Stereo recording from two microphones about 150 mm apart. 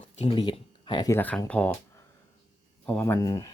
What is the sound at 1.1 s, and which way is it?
Speech, 10° left (ahead or behind).